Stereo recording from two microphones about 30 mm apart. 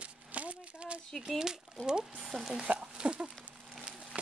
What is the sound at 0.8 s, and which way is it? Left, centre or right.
Speech, right.